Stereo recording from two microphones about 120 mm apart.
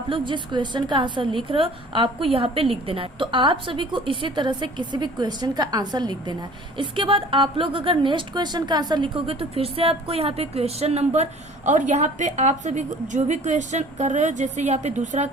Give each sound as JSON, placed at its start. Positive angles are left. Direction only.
{"t": 0.1, "sound": "a woman's voice", "side_deg": -40}